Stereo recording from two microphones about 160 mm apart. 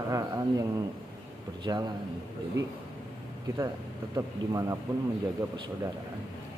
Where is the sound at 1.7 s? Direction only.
25° right (ahead or behind).